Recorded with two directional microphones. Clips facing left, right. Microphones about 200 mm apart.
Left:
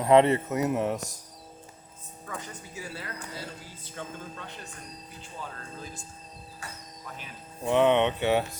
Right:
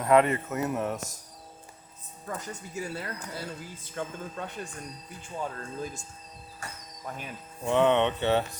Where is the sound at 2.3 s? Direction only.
45° right (ahead or behind).